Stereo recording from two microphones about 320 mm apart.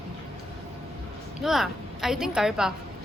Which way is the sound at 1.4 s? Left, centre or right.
Centre.